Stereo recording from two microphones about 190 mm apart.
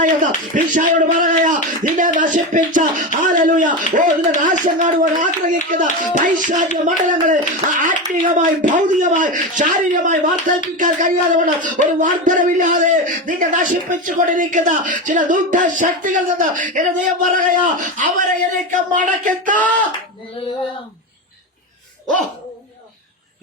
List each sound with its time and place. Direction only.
0.5 s speech: 40° right (ahead or behind)